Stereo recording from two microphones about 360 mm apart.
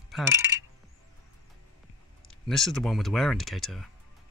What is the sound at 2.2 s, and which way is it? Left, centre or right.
Speech, centre.